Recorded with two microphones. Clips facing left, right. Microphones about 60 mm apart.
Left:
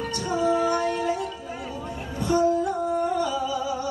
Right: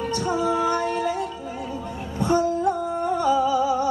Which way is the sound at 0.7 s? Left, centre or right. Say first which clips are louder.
Right 1 dB; right.